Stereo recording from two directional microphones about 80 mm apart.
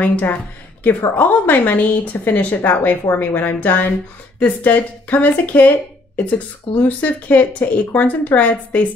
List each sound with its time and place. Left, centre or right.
0.0 s a woman's voice: left